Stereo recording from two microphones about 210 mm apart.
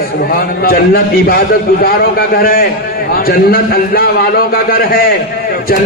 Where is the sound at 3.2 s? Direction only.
45° left (ahead or behind).